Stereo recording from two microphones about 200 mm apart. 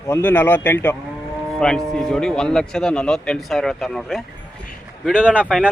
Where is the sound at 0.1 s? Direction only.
10° left (ahead or behind).